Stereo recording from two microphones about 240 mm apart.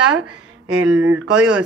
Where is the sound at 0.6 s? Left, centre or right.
Right.